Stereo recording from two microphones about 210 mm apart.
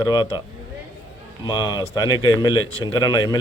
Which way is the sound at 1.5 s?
20° left (ahead or behind).